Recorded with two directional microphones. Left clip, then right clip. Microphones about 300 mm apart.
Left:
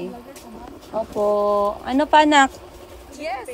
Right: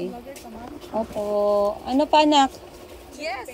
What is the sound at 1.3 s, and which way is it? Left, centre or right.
Speech, left.